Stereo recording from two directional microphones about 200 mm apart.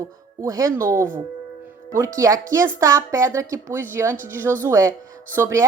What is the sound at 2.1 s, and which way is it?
A woman's voice, 15° right (ahead or behind).